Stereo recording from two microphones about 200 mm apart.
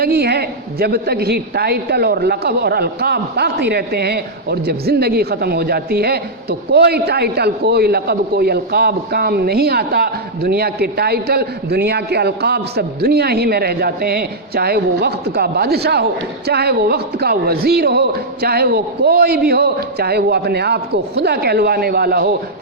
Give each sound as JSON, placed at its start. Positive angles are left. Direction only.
{"t": 0.0, "sound": "a woman's voice", "side_deg": -55}